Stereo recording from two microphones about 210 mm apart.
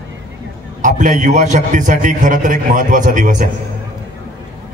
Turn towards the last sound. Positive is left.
turn(degrees=-35)  # may be behind; listen again after turning